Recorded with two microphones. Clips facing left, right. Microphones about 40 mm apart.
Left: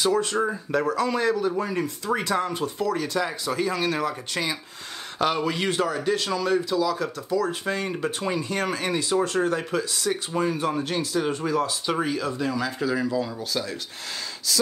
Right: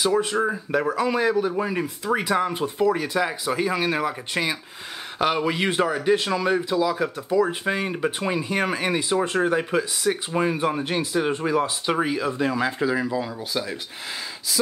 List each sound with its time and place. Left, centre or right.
0.0 s speech: centre; by 12.9 s right
12.9 s speech: centre